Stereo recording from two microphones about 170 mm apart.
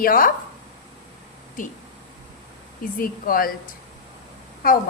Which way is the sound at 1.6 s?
50° left (ahead or behind).